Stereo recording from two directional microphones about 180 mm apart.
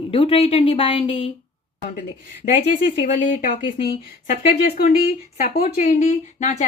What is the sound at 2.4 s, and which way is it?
Speech, 45° left (ahead or behind).